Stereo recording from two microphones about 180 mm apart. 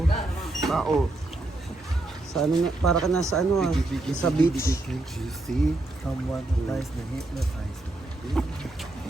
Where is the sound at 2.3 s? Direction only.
Centre (ahead or behind).